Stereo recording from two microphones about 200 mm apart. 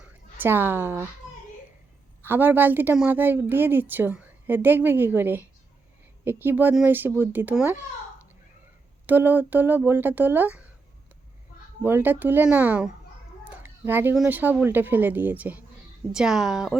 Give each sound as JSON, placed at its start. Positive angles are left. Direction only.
{"t": 0.0, "sound": "a woman's voice", "side_deg": -10}
{"t": 2.2, "sound": "a woman's voice", "side_deg": -10}
{"t": 9.0, "sound": "a woman's voice", "side_deg": -10}
{"t": 11.8, "sound": "a woman's voice", "side_deg": -10}